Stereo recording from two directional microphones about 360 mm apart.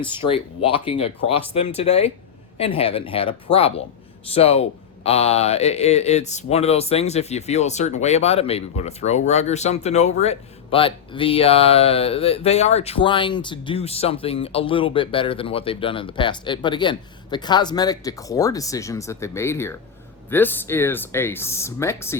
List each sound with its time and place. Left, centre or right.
0.3 s speech: centre